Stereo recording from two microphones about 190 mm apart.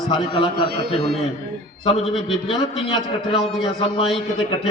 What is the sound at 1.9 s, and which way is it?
A man's voice, 30° left (ahead or behind).